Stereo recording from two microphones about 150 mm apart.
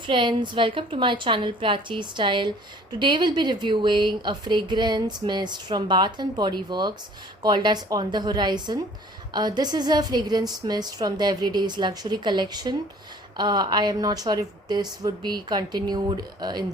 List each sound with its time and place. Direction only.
0.0 s a woman's voice: 35° right (ahead or behind)